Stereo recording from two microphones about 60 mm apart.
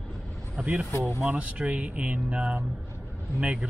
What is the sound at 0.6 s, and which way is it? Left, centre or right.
A man's voice, right.